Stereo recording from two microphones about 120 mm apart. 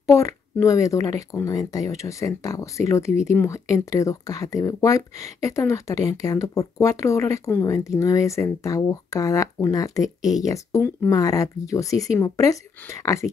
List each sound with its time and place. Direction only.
0.0 s a woman's voice: 25° left (ahead or behind)